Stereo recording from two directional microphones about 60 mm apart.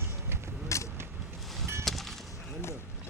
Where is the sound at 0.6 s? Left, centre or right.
Left.